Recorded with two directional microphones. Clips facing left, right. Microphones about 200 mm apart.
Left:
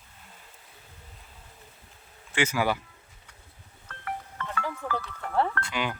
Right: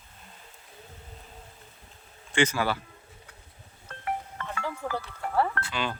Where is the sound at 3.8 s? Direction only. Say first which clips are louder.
Right 3 dB; 20° right (ahead or behind).